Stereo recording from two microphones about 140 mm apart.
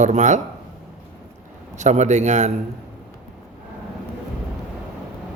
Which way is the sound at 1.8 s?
55° right (ahead or behind).